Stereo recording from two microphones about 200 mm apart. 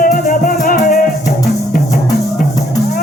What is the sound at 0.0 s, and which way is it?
Music, 45° left (ahead or behind).